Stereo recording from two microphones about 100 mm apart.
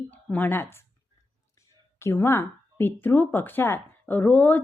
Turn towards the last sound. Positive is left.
turn(degrees=15)  # may be behind; listen again after turning